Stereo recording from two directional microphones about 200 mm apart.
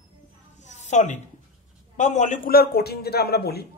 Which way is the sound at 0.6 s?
35° left (ahead or behind).